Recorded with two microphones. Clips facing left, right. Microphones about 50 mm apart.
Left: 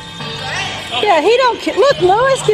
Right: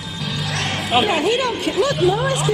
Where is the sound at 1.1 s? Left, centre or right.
Left.